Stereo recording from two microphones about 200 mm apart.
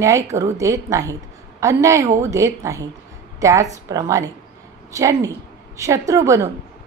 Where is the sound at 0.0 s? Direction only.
15° right (ahead or behind).